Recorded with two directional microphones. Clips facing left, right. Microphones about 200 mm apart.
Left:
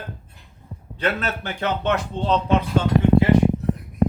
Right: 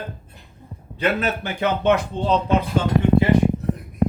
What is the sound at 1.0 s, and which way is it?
A man's voice, 10° right (ahead or behind).